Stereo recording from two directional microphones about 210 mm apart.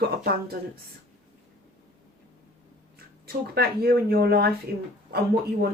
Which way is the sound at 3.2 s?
45° right (ahead or behind).